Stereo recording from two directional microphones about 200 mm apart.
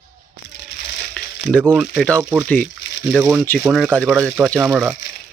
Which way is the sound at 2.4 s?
5° left (ahead or behind).